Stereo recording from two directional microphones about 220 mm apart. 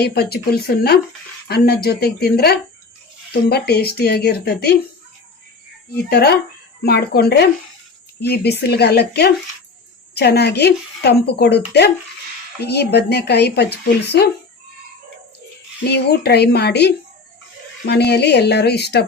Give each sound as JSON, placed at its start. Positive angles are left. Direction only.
{"t": 0.0, "sound": "a woman's voice", "side_deg": 45}
{"t": 5.9, "sound": "a woman's voice", "side_deg": 45}
{"t": 15.9, "sound": "a woman's voice", "side_deg": 50}